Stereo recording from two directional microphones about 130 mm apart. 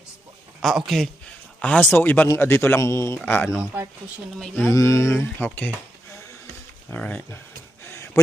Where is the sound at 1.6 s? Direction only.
10° left (ahead or behind).